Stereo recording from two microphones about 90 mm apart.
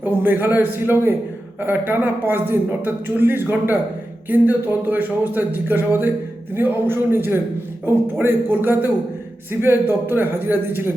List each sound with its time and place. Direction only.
0.0 s speech: 20° right (ahead or behind)